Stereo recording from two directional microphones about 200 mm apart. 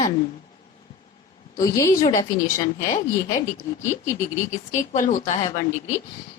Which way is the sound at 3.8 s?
15° left (ahead or behind).